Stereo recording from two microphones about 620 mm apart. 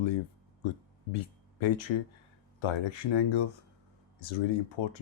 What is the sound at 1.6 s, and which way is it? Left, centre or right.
Speech, left.